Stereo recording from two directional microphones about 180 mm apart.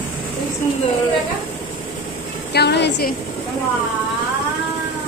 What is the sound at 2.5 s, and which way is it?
Speech, 70° left (ahead or behind).